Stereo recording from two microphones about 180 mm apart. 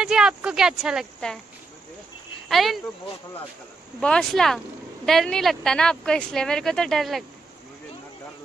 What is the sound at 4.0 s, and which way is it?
Speech, 5° left (ahead or behind).